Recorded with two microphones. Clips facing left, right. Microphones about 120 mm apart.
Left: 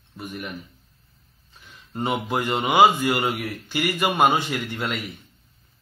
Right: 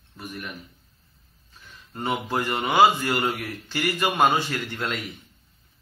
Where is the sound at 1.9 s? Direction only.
20° left (ahead or behind).